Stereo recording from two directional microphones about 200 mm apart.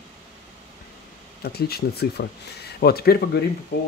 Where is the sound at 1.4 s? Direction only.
50° left (ahead or behind).